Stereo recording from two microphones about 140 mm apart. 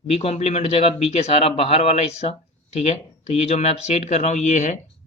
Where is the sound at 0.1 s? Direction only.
45° left (ahead or behind).